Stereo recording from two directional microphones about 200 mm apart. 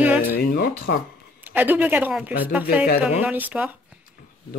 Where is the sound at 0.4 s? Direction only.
55° left (ahead or behind).